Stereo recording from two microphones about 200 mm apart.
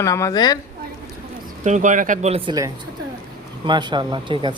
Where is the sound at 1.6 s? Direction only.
35° right (ahead or behind).